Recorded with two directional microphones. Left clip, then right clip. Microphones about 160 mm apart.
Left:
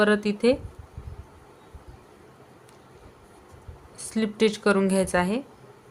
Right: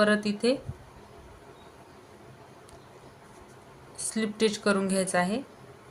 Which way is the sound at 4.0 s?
40° left (ahead or behind).